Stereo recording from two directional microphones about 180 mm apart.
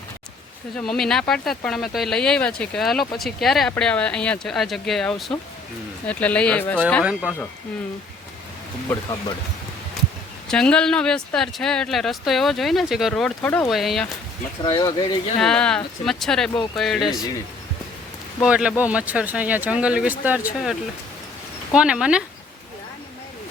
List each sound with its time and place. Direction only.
0.8 s speech: 5° left (ahead or behind)
7.0 s speech: 5° right (ahead or behind)
8.9 s speech: 10° left (ahead or behind)
10.5 s speech: 5° left (ahead or behind)
14.6 s speech: 20° left (ahead or behind)
15.4 s speech: 5° left (ahead or behind)
18.4 s speech: 5° right (ahead or behind)